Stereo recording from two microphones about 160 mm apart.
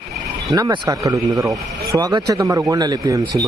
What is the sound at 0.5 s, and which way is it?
Speech, 25° right (ahead or behind).